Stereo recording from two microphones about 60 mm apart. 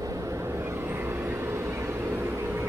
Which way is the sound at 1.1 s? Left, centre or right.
Right.